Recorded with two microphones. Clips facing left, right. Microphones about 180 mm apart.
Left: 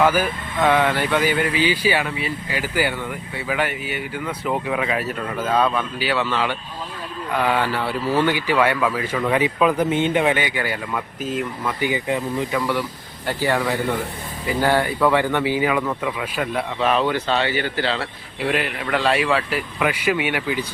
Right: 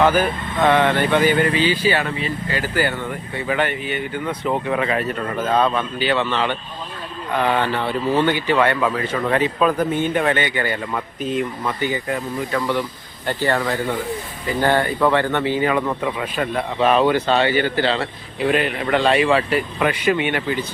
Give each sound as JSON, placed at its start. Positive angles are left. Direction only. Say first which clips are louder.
{"t": 0.0, "sound": "speech", "louder": "right 2 dB", "side_deg": 10}
{"t": 8.0, "sound": "speech", "louder": "right 1 dB", "side_deg": -20}
{"t": 8.3, "sound": "speech", "louder": "right 1 dB", "side_deg": 10}
{"t": 14.6, "sound": "speech", "louder": "right 1 dB", "side_deg": 10}
{"t": 16.8, "sound": "speech", "louder": "right 4 dB", "side_deg": -45}
{"t": 17.8, "sound": "a man's voice", "louder": "right 3 dB", "side_deg": 5}